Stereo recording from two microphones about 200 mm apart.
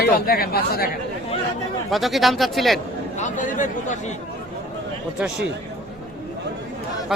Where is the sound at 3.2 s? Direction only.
40° left (ahead or behind).